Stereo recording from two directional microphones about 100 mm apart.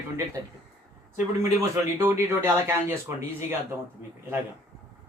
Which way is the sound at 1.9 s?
25° right (ahead or behind).